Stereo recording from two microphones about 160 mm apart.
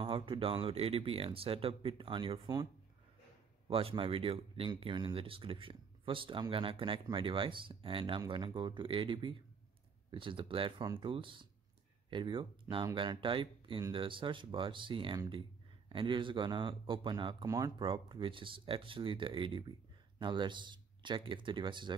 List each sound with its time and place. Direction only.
0.0 s speech: 35° right (ahead or behind)